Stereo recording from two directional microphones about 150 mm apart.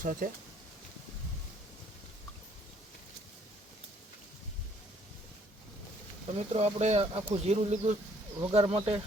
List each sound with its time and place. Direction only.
0.0 s speech: 65° right (ahead or behind)
6.3 s speech: 45° right (ahead or behind)